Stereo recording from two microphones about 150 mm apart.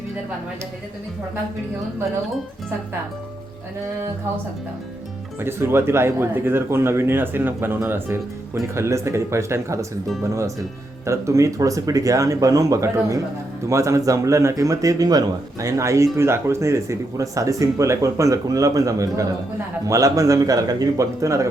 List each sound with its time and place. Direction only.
5.4 s speech: 15° right (ahead or behind)
11.0 s speech: 20° right (ahead or behind)